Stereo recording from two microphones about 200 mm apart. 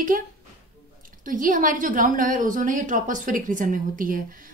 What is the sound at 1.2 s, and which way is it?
A woman's voice, 40° right (ahead or behind).